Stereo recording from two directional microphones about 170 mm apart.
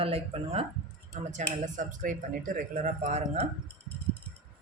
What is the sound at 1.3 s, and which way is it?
Speech, 50° right (ahead or behind).